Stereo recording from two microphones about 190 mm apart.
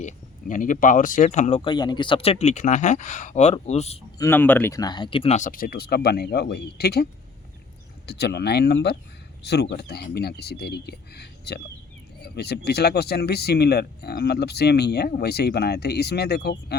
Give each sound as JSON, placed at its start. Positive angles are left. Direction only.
{"t": 0.0, "sound": "speech", "side_deg": 45}
{"t": 4.2, "sound": "speech", "side_deg": 10}